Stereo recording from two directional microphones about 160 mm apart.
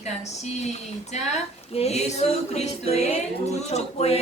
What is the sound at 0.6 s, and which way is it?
Speech, 45° left (ahead or behind).